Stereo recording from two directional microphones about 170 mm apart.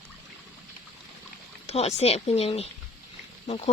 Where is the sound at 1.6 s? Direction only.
40° left (ahead or behind).